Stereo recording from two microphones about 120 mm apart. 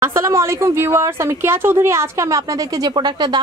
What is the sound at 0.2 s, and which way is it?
A woman's voice, 25° right (ahead or behind).